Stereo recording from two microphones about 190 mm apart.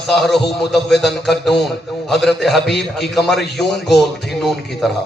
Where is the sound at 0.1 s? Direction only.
Centre (ahead or behind).